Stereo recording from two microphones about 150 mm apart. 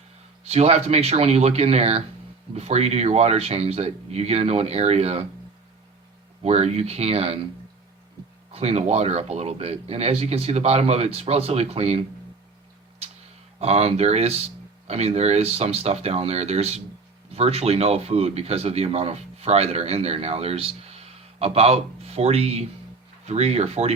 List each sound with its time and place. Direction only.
0.4 s speech: 45° right (ahead or behind)
6.4 s speech: 45° right (ahead or behind)
8.5 s speech: 45° right (ahead or behind)
13.6 s speech: 45° right (ahead or behind)